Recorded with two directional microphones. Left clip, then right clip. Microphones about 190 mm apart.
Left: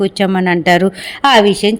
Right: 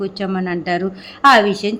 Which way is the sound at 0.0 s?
25° left (ahead or behind).